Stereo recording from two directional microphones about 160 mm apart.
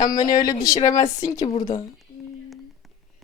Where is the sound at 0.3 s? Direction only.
25° left (ahead or behind).